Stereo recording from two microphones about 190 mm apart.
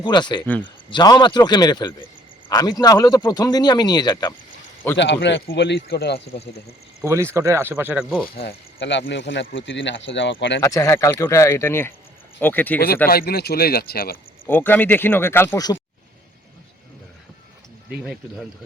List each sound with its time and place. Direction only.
0.0 s speech: 25° left (ahead or behind)
4.9 s a man's voice: 70° left (ahead or behind)
6.1 s speech: 35° left (ahead or behind)
7.0 s speech: 15° right (ahead or behind)
8.4 s speech: 65° left (ahead or behind)
10.6 s speech: 15° left (ahead or behind)
13.1 s speech: 50° left (ahead or behind)
14.4 s speech: 10° left (ahead or behind)
18.0 s speech: 5° right (ahead or behind)